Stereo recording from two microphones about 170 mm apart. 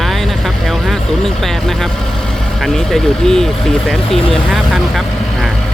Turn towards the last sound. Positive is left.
turn(degrees=0)  # may be behind; listen again after turning